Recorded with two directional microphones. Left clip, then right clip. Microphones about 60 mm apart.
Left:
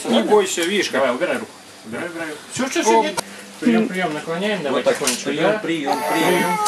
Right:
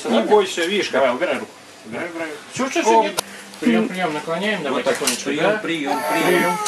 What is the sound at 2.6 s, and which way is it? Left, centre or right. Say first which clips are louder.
Speech: right 1 dB; right.